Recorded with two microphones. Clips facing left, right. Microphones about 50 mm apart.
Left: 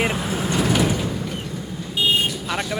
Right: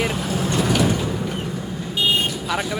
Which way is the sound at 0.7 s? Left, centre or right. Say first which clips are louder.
Right 2 dB; centre.